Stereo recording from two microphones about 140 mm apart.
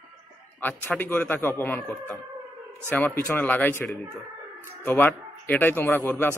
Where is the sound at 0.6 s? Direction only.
10° left (ahead or behind).